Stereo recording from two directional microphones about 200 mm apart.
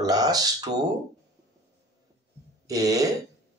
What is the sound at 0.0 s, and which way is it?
Speech, 20° right (ahead or behind).